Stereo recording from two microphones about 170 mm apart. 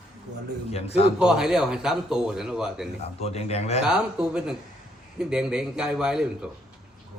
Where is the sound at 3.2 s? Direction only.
40° left (ahead or behind).